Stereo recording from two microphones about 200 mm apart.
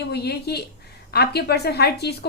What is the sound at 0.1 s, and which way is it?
A woman's voice, 55° left (ahead or behind).